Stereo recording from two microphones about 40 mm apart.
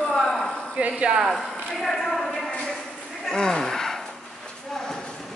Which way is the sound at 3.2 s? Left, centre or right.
Centre.